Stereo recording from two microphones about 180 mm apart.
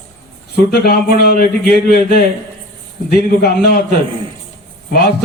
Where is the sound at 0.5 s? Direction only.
60° left (ahead or behind).